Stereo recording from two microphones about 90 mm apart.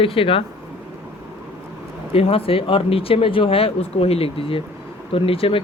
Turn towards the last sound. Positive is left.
turn(degrees=90)